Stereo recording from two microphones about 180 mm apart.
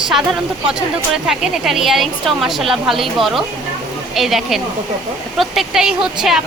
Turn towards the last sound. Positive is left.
turn(degrees=-5)  # may be behind; listen again after turning